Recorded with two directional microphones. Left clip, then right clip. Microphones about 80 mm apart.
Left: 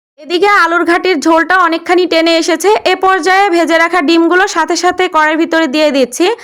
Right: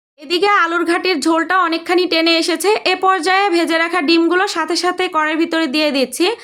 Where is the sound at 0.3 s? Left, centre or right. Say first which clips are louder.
Left 5 dB; left.